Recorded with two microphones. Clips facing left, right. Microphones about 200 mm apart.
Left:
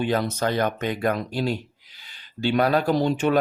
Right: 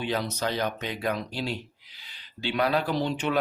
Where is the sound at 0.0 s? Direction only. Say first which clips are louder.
Left 5 dB; 50° left (ahead or behind).